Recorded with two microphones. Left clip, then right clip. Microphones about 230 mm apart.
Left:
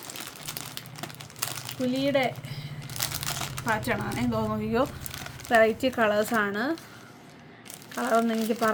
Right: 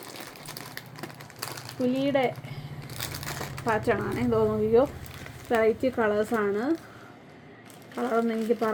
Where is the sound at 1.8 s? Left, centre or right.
Left.